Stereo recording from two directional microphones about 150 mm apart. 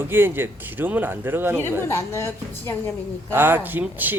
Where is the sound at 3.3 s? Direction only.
15° right (ahead or behind).